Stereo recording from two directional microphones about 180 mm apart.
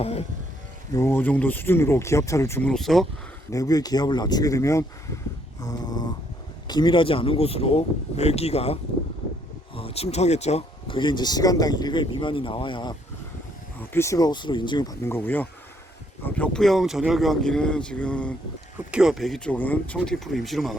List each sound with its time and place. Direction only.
0.0 s speech: 35° left (ahead or behind)
0.9 s speech: 10° left (ahead or behind)
3.5 s speech: 20° left (ahead or behind)
18.9 s speech: 5° right (ahead or behind)